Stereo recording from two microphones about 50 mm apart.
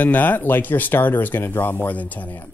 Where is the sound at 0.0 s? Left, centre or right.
Left.